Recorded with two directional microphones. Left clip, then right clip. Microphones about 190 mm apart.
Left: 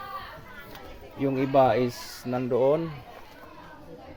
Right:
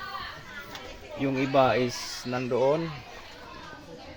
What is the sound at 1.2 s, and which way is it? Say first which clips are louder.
Speech: left 2 dB; 15° left (ahead or behind).